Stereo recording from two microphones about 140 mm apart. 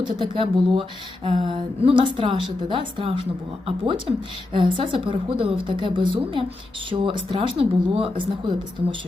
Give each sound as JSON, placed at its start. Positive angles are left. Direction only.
{"t": 0.0, "sound": "speech", "side_deg": -35}